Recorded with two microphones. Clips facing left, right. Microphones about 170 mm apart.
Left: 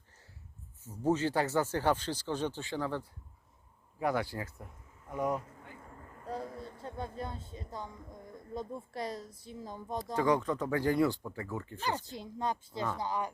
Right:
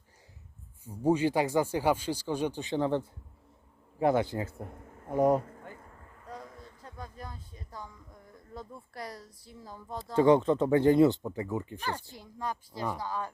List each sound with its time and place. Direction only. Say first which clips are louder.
0.9 s speech: right 4 dB; 10° right (ahead or behind)
4.5 s speech: right 8 dB; 55° right (ahead or behind)
5.0 s speech: right 8 dB; 35° right (ahead or behind)
6.2 s a sound: left 6 dB; 30° left (ahead or behind)
7.2 s speech: left 5 dB; 25° left (ahead or behind)
10.2 s speech: right 7 dB; 25° right (ahead or behind)
11.8 s a woman's voice: left 1 dB; 15° left (ahead or behind)